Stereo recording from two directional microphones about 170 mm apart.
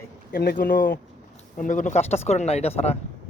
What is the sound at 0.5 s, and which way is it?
Speech, 55° left (ahead or behind).